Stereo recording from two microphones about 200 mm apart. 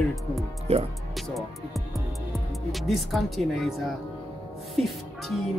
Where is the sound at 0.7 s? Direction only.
30° right (ahead or behind).